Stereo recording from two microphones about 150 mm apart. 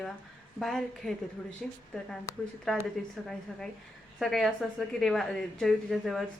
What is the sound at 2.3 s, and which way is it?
Speech, 20° left (ahead or behind).